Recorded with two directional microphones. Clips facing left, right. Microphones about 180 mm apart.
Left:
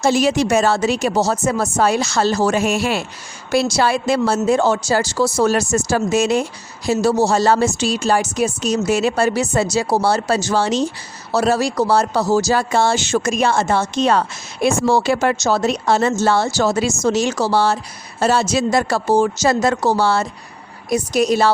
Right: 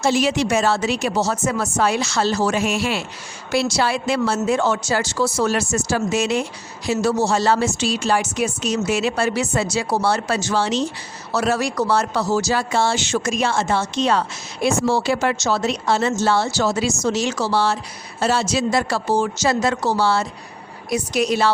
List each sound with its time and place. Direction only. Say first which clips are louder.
0.0 s a woman's voice: left 3 dB; 45° left (ahead or behind)
11.3 s speech: left 4 dB; 35° left (ahead or behind)